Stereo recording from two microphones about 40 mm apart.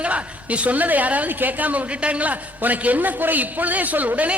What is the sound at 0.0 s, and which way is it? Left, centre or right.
A woman's voice, right.